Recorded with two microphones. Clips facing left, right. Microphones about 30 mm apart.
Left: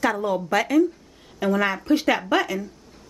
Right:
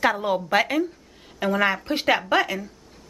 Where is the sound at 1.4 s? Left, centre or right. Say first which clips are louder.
Even; centre.